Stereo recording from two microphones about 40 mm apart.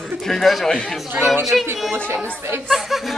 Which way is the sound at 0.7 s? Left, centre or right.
Left.